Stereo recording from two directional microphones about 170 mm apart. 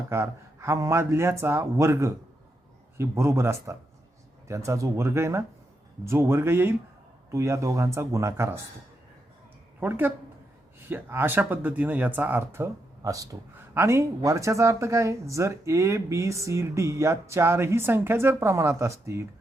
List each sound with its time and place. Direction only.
0.1 s speech: 15° right (ahead or behind)
9.8 s speech: 10° right (ahead or behind)